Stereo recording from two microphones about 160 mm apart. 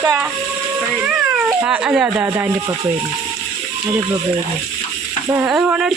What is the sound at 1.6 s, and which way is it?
Speech, 5° right (ahead or behind).